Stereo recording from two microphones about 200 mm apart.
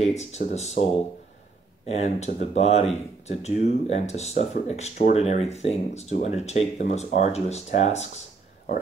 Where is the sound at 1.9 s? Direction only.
35° left (ahead or behind).